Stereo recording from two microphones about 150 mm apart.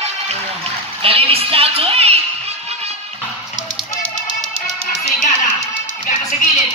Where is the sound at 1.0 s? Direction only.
40° right (ahead or behind).